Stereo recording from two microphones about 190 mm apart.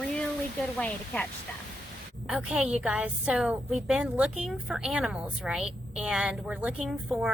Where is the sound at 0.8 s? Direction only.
5° left (ahead or behind).